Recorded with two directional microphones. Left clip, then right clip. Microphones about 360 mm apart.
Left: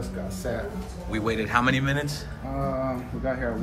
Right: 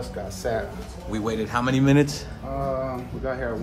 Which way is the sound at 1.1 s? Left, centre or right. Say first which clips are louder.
Left 1 dB; centre.